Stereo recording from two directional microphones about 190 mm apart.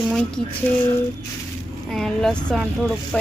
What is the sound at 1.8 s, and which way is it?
Speech, centre (ahead or behind).